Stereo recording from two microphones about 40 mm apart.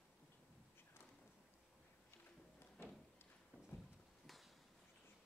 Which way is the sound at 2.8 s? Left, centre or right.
Left.